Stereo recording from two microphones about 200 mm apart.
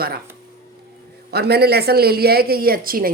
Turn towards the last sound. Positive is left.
turn(degrees=-45)  # may be behind; listen again after turning